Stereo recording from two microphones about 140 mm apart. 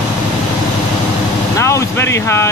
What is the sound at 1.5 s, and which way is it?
Speech, 20° left (ahead or behind).